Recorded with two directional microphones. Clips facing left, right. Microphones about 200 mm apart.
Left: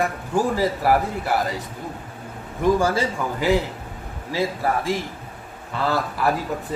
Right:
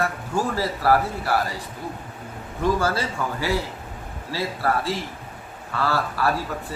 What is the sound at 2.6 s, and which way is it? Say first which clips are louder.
A man's voice: left 3 dB; 15° left (ahead or behind).